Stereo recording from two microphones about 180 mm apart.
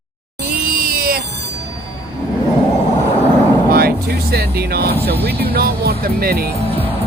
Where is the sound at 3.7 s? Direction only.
60° right (ahead or behind).